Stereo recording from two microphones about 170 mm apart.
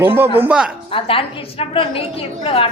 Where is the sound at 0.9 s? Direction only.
30° left (ahead or behind).